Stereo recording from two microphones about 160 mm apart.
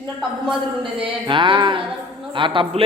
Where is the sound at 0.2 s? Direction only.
5° right (ahead or behind).